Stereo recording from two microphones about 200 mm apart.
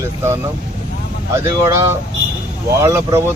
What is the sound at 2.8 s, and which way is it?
Speech, 15° right (ahead or behind).